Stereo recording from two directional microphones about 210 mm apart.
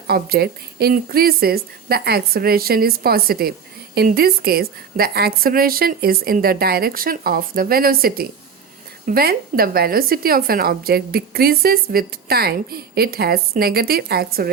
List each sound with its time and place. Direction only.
0.1 s speech: 50° right (ahead or behind)